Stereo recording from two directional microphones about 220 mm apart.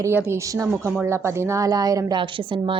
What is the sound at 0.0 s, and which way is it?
A woman's voice, 10° right (ahead or behind).